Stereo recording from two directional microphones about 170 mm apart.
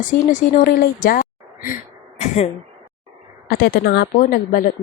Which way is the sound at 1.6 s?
50° left (ahead or behind).